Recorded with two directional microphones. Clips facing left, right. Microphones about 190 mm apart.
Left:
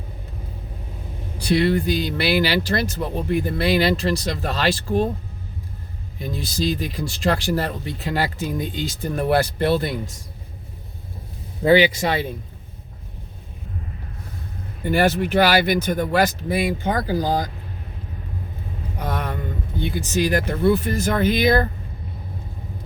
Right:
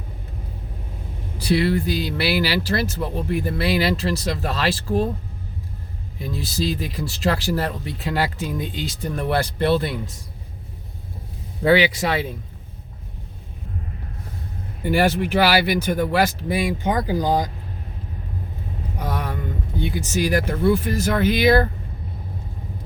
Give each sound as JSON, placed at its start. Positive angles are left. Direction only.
{"t": 1.4, "sound": "speech", "side_deg": -5}
{"t": 6.1, "sound": "speech", "side_deg": 0}
{"t": 11.8, "sound": "speech", "side_deg": 0}
{"t": 14.8, "sound": "speech", "side_deg": -10}
{"t": 18.9, "sound": "speech", "side_deg": -10}